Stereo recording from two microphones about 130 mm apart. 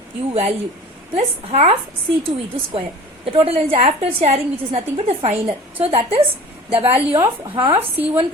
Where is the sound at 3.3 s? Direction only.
50° right (ahead or behind).